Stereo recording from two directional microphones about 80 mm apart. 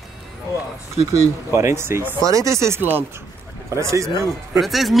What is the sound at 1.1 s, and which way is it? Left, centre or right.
Speech, right.